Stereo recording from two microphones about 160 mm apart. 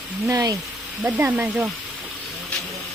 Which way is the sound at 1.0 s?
10° right (ahead or behind).